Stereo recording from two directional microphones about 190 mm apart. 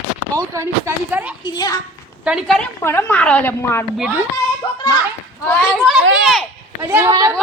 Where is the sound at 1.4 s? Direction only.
20° left (ahead or behind).